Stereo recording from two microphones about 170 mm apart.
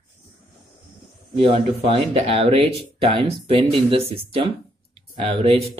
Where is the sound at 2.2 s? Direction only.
35° right (ahead or behind).